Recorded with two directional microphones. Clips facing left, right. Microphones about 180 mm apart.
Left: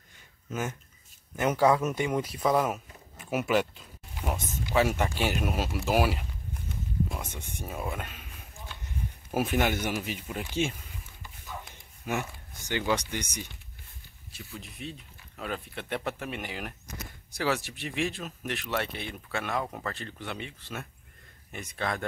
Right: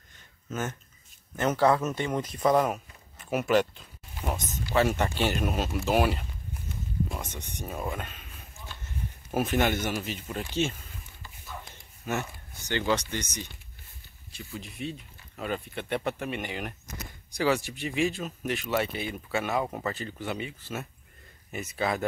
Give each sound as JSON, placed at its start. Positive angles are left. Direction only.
{"t": 0.5, "sound": "speech", "side_deg": 10}
{"t": 11.2, "sound": "a sound", "side_deg": 10}
{"t": 14.3, "sound": "speech", "side_deg": 0}